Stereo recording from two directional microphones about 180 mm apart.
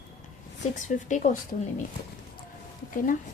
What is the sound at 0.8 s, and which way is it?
Speech, 45° left (ahead or behind).